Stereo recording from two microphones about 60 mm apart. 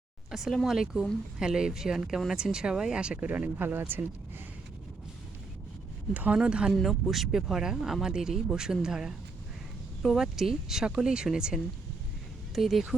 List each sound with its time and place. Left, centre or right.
0.3 s speech: centre; by 4.0 s right
6.1 s speech: right
6.8 s speech: centre